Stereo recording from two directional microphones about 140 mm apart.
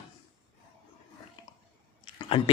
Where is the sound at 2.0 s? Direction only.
40° left (ahead or behind).